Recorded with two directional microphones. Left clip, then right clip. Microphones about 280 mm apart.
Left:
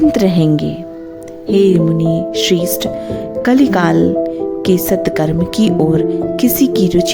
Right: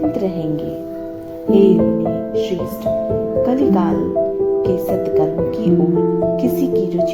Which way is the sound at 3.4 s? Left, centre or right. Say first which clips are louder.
Left 5 dB; left.